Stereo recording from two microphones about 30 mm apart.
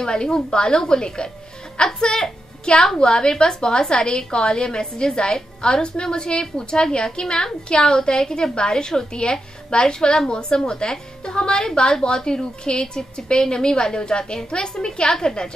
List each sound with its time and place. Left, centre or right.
0.0 s a woman's voice: left
15.0 s a woman's voice: centre